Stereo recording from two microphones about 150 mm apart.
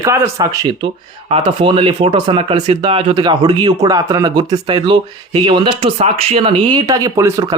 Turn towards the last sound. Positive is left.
turn(degrees=-20)  # may be behind; listen again after turning